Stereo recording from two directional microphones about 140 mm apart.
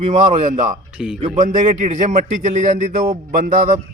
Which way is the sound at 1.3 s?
65° right (ahead or behind).